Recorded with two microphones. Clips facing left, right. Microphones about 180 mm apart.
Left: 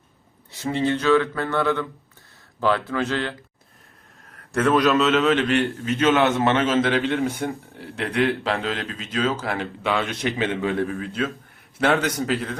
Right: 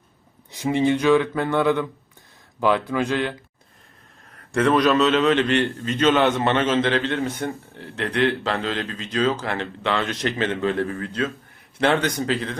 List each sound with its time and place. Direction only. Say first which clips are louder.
0.5 s speech: right 3 dB; 15° right (ahead or behind)
4.5 s a man's voice: right 1 dB; centre (ahead or behind)